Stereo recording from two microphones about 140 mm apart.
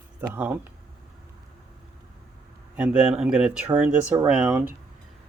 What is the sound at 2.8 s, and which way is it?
Speech, 5° right (ahead or behind).